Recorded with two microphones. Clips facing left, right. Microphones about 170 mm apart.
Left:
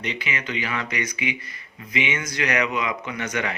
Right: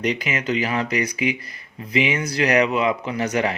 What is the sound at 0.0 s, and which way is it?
Speech, 40° right (ahead or behind).